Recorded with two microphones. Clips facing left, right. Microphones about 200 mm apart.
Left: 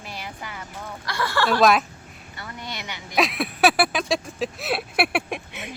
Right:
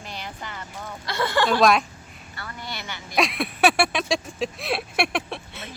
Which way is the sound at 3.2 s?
Centre (ahead or behind).